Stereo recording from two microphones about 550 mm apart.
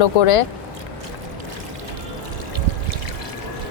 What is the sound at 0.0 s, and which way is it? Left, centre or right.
Speech, left.